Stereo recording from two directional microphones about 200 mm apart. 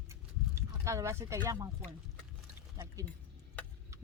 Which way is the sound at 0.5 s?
15° right (ahead or behind).